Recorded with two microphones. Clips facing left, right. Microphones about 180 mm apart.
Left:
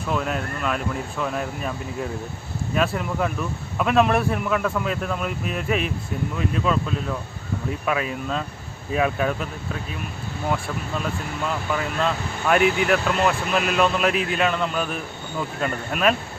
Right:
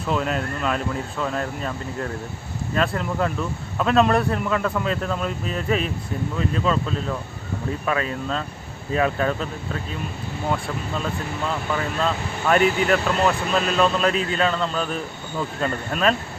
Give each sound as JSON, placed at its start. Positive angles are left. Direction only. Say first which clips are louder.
{"t": 0.1, "sound": "a man's voice", "louder": "right 2 dB", "side_deg": 5}
{"t": 11.7, "sound": "speech", "louder": "even", "side_deg": 5}